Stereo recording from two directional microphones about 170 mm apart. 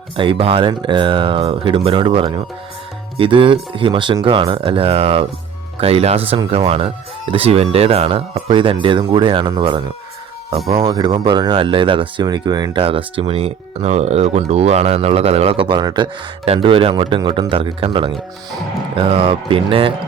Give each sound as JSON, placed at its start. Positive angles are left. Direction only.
{"t": 0.2, "sound": "speech", "side_deg": -30}